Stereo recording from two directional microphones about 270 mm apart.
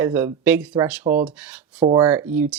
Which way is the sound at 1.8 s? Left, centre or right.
Centre.